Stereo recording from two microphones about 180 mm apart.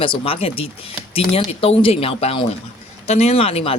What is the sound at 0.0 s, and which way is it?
Speech, 30° left (ahead or behind).